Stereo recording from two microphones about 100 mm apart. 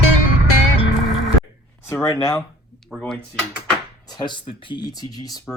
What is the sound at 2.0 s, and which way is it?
Speech, 35° left (ahead or behind).